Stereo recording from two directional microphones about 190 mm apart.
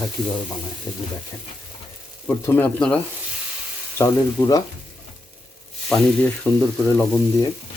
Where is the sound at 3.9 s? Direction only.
15° left (ahead or behind).